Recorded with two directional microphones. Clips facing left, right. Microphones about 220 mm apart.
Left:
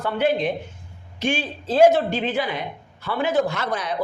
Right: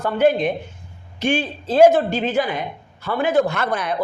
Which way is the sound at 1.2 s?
55° right (ahead or behind).